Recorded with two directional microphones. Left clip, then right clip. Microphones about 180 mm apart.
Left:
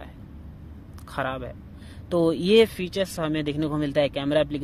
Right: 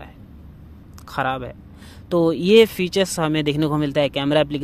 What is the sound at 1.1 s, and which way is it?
Speech, 25° right (ahead or behind).